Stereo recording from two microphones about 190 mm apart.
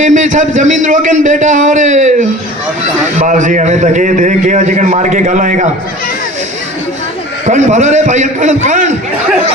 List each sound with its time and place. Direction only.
0.0 s a man's voice: 40° right (ahead or behind)
7.4 s a man's voice: 40° right (ahead or behind)